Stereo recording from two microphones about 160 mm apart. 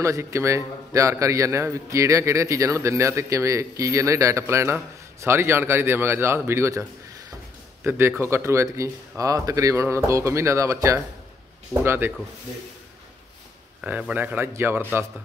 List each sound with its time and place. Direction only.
0.0 s a man's voice: 20° right (ahead or behind)
13.7 s a man's voice: 10° right (ahead or behind)